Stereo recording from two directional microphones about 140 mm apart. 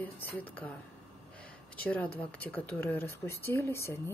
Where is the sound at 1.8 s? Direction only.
10° left (ahead or behind).